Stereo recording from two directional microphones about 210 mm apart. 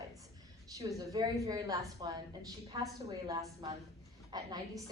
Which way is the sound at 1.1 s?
15° right (ahead or behind).